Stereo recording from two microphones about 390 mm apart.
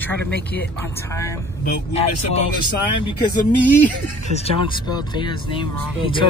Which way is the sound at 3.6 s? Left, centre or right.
Centre.